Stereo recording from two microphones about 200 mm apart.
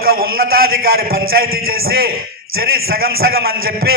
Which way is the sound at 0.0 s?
50° right (ahead or behind).